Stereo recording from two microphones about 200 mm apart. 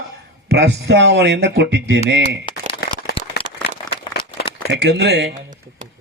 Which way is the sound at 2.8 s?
50° left (ahead or behind).